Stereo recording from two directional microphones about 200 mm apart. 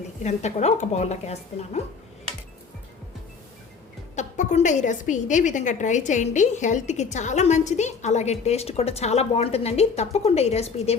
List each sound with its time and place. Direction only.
0.2 s a woman's voice: 35° left (ahead or behind)
4.1 s a woman's voice: 35° left (ahead or behind)